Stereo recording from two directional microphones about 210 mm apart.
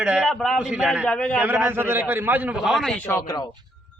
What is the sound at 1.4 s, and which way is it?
A man's voice, 10° right (ahead or behind).